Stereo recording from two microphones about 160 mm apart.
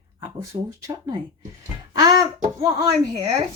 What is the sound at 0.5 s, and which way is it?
Speech, 40° right (ahead or behind).